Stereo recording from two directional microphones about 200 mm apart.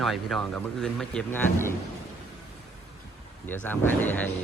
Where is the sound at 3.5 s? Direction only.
10° left (ahead or behind).